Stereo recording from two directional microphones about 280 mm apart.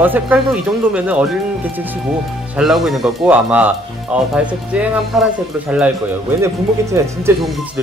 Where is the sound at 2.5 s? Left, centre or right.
Centre.